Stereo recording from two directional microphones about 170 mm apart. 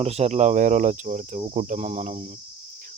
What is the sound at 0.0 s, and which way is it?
Speech, 40° right (ahead or behind).